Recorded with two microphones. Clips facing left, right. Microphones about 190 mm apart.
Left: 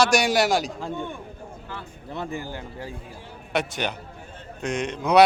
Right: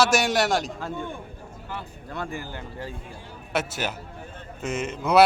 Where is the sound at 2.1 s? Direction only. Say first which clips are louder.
Left 2 dB; 20° left (ahead or behind).